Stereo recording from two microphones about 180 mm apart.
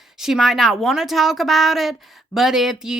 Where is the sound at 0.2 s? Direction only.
Centre (ahead or behind).